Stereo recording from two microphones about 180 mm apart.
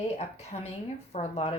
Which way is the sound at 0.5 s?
40° left (ahead or behind).